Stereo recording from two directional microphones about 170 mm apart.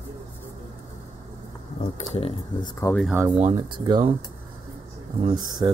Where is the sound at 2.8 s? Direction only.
20° left (ahead or behind).